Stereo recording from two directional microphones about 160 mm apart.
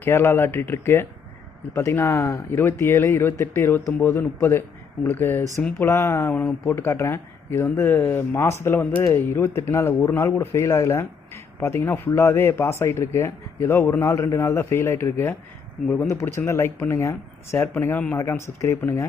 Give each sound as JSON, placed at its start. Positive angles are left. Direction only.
{"t": 0.0, "sound": "speech", "side_deg": 15}